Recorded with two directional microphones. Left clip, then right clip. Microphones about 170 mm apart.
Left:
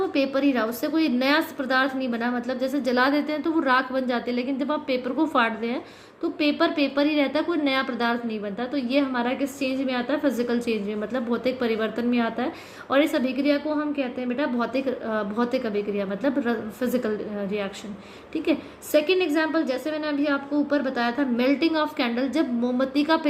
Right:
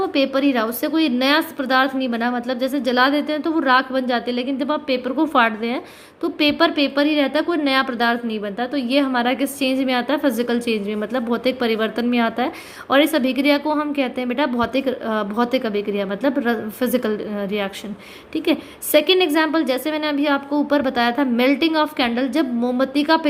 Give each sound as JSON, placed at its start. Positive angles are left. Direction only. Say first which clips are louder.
{"t": 0.0, "sound": "a woman's voice", "louder": "right 4 dB", "side_deg": -30}